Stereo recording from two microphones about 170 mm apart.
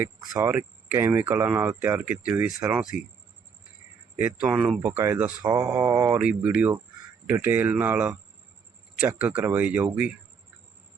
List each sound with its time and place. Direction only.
0.0 s speech: 10° right (ahead or behind)
4.2 s speech: 10° right (ahead or behind)